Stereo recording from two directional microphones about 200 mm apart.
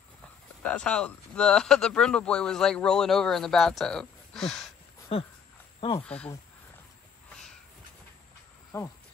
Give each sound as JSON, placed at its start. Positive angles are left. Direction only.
{"t": 0.6, "sound": "speech", "side_deg": 5}
{"t": 5.8, "sound": "speech", "side_deg": 25}
{"t": 6.0, "sound": "speech", "side_deg": 5}
{"t": 8.7, "sound": "speech", "side_deg": 15}